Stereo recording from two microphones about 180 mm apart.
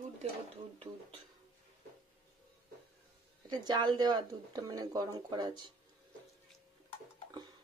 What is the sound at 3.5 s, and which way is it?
Speech, 25° right (ahead or behind).